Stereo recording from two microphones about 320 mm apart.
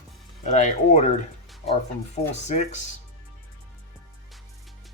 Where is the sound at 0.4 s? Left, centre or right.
Left.